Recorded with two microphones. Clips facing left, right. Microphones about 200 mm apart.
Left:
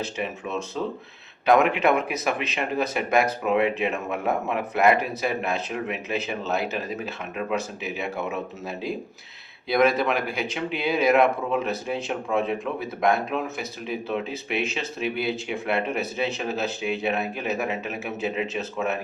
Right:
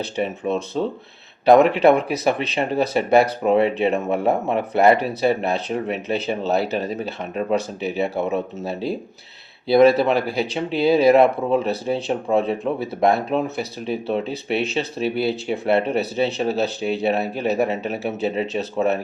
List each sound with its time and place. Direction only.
0.0 s speech: 35° right (ahead or behind)